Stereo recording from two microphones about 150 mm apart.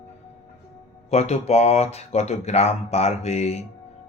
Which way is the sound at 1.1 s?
45° left (ahead or behind).